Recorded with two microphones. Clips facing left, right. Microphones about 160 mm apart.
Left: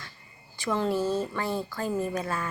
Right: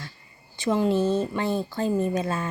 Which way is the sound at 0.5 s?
20° right (ahead or behind).